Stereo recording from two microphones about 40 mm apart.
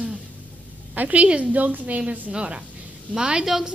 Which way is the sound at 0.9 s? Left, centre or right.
Right.